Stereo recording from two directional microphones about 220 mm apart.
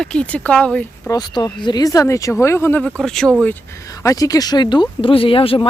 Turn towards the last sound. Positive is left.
turn(degrees=25)  # may be behind; listen again after turning